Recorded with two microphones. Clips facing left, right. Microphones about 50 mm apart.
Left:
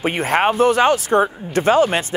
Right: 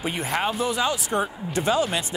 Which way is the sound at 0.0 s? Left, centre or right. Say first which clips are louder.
Left 8 dB; left.